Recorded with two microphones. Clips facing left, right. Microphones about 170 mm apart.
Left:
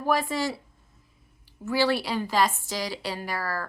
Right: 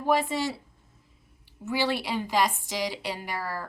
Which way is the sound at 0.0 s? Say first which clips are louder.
Even; 20° right (ahead or behind).